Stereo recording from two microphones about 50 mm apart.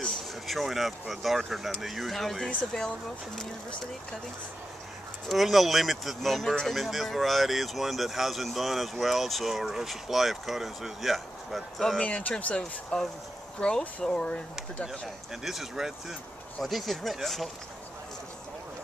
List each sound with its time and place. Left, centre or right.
0.5 s speech: centre
5.3 s speech: centre
12.0 s speech: left
12.9 s speech: centre
15.4 s speech: centre
16.6 s speech: centre